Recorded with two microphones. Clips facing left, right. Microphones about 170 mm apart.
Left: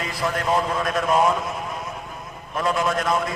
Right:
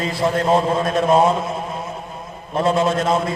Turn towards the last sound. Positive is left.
turn(degrees=-25)  # may be behind; listen again after turning